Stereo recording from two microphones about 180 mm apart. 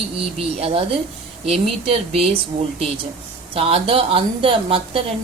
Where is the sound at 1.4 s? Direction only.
35° right (ahead or behind).